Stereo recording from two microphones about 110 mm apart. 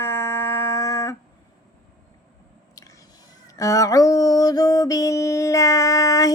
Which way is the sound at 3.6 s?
30° left (ahead or behind).